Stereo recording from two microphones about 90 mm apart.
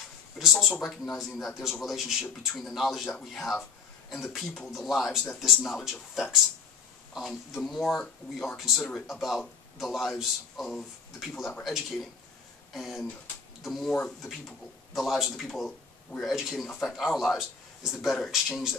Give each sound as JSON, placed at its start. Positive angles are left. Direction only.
{"t": 0.4, "sound": "speech", "side_deg": -5}
{"t": 15.0, "sound": "speech", "side_deg": 0}